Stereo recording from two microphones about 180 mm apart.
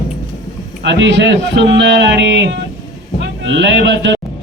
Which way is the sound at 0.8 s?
80° right.